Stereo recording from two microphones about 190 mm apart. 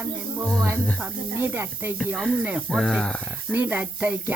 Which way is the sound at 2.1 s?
Centre (ahead or behind).